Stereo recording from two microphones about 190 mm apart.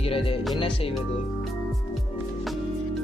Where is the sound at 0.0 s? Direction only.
30° left (ahead or behind).